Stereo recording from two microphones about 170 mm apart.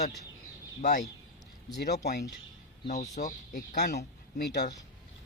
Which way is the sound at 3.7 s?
70° left (ahead or behind).